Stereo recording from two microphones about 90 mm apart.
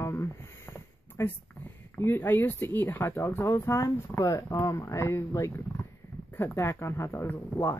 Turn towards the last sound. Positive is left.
turn(degrees=25)  # may be behind; listen again after turning